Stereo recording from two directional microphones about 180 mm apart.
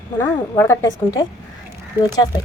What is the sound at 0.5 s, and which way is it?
Speech, 15° left (ahead or behind).